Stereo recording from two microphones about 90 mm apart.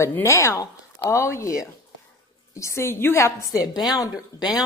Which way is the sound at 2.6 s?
30° left (ahead or behind).